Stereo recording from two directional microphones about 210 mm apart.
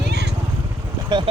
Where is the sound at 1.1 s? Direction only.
20° right (ahead or behind).